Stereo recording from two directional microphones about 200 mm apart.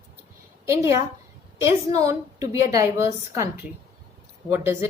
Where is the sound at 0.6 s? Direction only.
15° right (ahead or behind).